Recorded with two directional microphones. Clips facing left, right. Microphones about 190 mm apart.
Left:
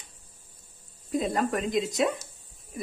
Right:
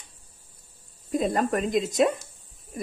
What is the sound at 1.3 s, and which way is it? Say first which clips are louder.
Speech: right 3 dB; 45° right (ahead or behind).